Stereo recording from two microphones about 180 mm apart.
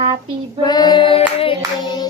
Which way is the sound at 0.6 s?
25° left (ahead or behind).